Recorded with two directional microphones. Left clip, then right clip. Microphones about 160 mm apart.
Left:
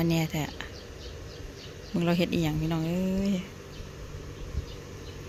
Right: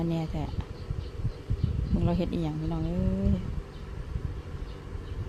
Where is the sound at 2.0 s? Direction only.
5° left (ahead or behind).